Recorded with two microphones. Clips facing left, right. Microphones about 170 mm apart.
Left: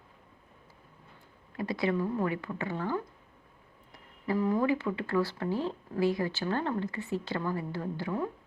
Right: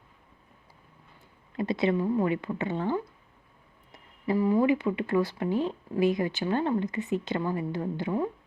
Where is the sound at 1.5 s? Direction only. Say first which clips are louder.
Right 4 dB; 20° right (ahead or behind).